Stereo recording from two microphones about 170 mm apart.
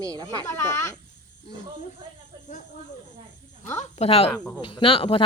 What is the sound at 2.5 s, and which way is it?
Speech, 45° left (ahead or behind).